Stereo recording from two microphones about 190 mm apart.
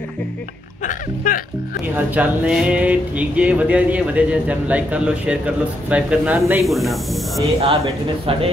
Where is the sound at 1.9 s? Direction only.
5° right (ahead or behind).